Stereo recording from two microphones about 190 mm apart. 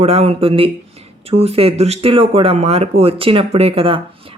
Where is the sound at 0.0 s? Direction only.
35° right (ahead or behind).